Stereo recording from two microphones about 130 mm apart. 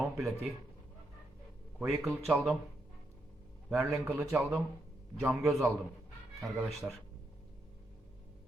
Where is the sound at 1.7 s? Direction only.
Centre (ahead or behind).